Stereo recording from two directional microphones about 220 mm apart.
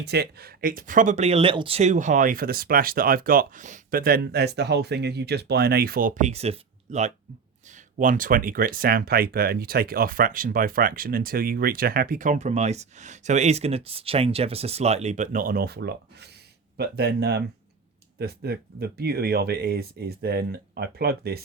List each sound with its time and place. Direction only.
0.0 s speech: 45° right (ahead or behind)